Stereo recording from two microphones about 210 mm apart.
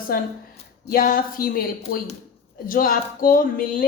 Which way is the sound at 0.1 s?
45° left (ahead or behind).